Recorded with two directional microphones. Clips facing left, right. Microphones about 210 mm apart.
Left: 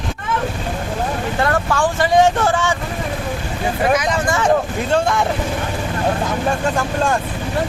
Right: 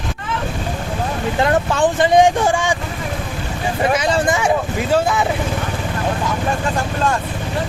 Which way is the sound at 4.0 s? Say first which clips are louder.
Right 2 dB; 30° right (ahead or behind).